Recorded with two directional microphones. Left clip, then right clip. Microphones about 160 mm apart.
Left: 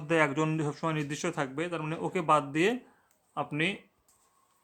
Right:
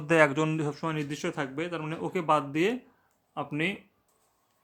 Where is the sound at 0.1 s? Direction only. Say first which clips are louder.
Right 4 dB; 10° right (ahead or behind); by 3.8 s 5° left (ahead or behind).